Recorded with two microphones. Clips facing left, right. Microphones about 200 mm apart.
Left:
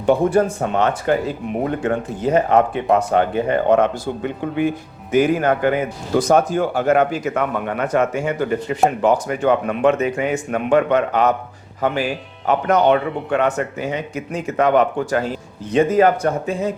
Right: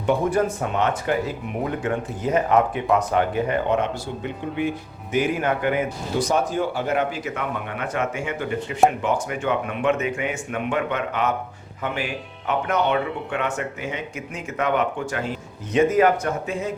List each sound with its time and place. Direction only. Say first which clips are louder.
0.0 s speech: left 5 dB; 30° left (ahead or behind)
3.8 s a man's voice: left 7 dB; 45° left (ahead or behind)